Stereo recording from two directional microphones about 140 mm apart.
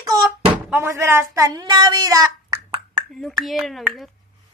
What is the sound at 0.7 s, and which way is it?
A woman's voice, 15° right (ahead or behind).